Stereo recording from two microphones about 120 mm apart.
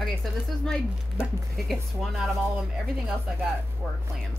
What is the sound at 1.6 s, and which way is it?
Speech, centre (ahead or behind).